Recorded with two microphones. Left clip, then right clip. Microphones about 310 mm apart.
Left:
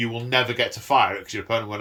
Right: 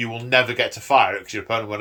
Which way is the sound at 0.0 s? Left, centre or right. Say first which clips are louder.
Right 3 dB; centre.